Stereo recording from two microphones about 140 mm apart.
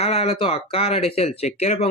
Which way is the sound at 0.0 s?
45° left (ahead or behind).